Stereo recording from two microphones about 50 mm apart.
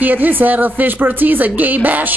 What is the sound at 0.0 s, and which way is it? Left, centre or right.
Speech, right.